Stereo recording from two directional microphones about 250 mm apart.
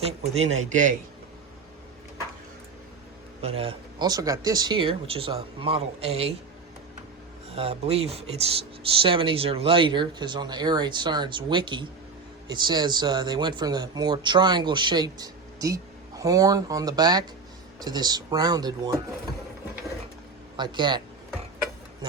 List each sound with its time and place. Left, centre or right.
0.2 s speech: right
3.4 s speech: right
7.5 s speech: right
20.6 s speech: centre